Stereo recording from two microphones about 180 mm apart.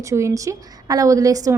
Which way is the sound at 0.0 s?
15° right (ahead or behind).